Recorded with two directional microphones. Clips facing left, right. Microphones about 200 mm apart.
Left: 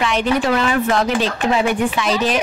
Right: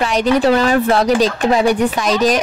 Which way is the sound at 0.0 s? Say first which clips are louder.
Right 4 dB; 40° right (ahead or behind).